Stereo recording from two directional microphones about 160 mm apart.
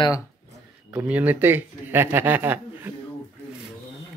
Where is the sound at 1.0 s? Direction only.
10° right (ahead or behind).